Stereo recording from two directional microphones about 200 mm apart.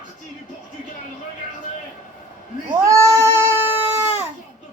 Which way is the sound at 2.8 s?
15° right (ahead or behind).